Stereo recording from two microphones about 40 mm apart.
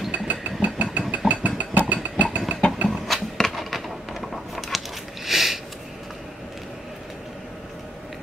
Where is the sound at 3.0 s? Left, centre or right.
Centre.